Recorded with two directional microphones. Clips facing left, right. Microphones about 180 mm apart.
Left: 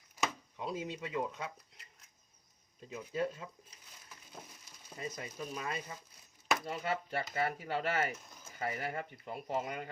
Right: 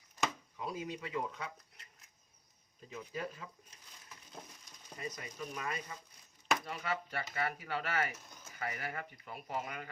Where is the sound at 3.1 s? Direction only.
25° left (ahead or behind).